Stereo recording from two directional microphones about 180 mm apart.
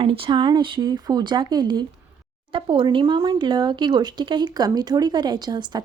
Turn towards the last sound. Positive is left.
turn(degrees=-25)  # may be behind; listen again after turning